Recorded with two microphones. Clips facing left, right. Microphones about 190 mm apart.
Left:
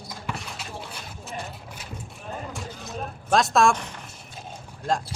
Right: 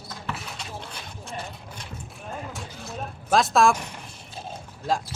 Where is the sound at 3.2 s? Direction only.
Centre (ahead or behind).